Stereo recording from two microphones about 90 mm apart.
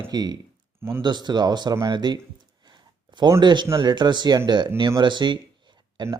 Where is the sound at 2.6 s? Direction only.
55° right (ahead or behind).